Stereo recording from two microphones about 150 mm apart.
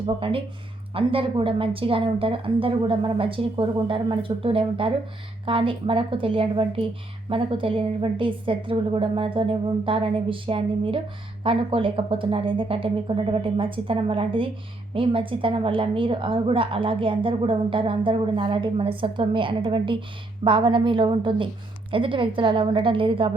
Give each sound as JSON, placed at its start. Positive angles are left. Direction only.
{"t": 0.2, "sound": "a woman's voice", "side_deg": -35}